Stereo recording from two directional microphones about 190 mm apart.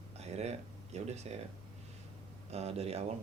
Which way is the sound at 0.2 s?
35° right (ahead or behind).